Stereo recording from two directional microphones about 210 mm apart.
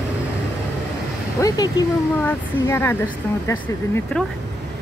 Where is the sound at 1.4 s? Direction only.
15° left (ahead or behind).